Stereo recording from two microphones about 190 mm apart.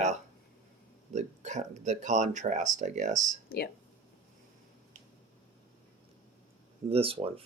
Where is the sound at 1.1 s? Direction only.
40° right (ahead or behind).